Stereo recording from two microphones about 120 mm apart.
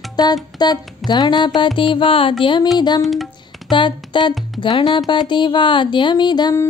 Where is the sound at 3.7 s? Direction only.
40° left (ahead or behind).